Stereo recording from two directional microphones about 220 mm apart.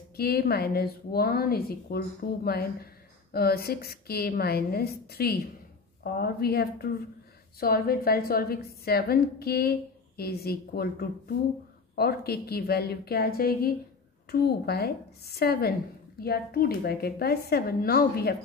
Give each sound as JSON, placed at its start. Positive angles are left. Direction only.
{"t": 0.1, "sound": "a woman's voice", "side_deg": 45}